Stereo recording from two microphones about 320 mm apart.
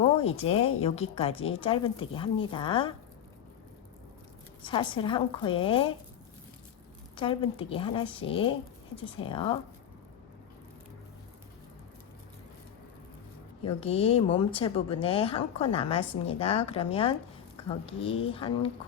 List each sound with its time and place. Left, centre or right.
0.4 s speech: centre
4.6 s speech: centre
7.2 s speech: centre
13.7 s speech: centre